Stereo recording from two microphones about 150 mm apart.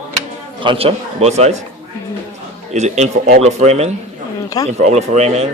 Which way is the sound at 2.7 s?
50° right (ahead or behind).